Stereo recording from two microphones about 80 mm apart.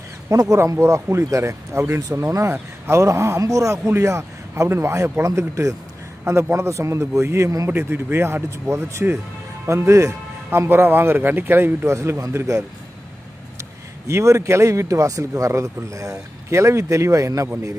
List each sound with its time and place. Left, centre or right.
0.3 s a man's voice: right
10.7 s a man's voice: right